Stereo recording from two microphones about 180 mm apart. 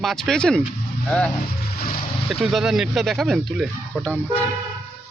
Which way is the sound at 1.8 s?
55° left (ahead or behind).